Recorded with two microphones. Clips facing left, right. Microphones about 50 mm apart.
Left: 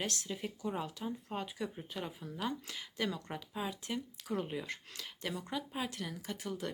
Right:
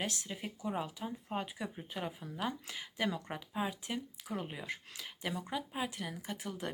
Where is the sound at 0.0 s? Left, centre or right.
Centre.